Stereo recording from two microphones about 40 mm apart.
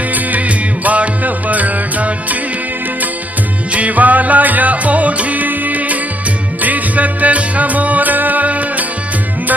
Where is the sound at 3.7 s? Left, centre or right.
Right.